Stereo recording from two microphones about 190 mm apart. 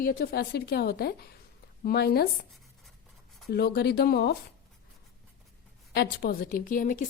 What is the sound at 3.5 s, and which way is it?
Speech, 55° left (ahead or behind).